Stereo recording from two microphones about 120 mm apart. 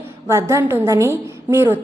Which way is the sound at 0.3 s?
20° right (ahead or behind).